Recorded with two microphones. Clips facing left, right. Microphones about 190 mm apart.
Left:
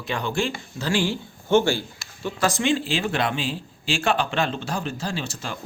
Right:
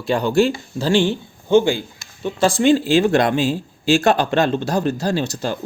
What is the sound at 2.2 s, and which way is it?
Speech, 30° right (ahead or behind).